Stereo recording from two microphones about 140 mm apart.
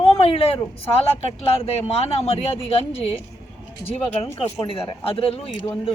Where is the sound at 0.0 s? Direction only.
45° left (ahead or behind).